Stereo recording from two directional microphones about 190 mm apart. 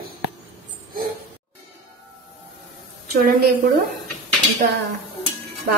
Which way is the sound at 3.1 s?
55° right (ahead or behind).